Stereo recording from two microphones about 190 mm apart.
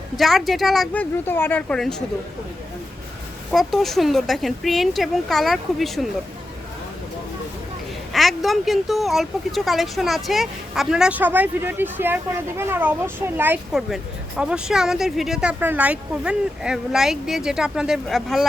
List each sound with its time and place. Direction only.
0.2 s a woman's voice: centre (ahead or behind)
3.5 s a woman's voice: centre (ahead or behind)
8.1 s a woman's voice: centre (ahead or behind)